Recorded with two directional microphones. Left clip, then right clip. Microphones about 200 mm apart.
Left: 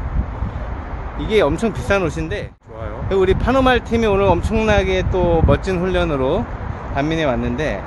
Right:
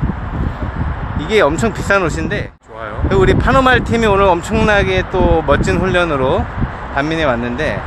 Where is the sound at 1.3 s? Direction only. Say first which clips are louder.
Right 4 dB; 10° right (ahead or behind).